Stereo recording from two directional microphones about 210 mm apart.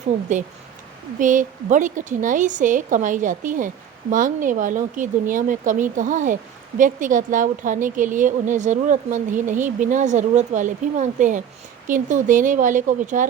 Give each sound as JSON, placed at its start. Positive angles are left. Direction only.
{"t": 0.0, "sound": "speech", "side_deg": -35}